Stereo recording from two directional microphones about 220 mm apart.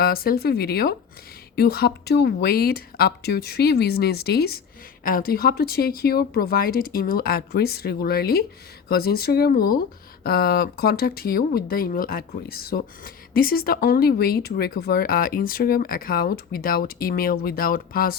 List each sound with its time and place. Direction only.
0.0 s speech: 45° left (ahead or behind)